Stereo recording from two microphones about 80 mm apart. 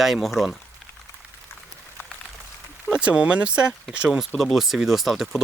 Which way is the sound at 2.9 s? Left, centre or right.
Centre.